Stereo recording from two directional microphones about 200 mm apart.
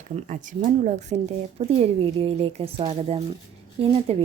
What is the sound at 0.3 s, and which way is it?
A woman's voice, 40° right (ahead or behind).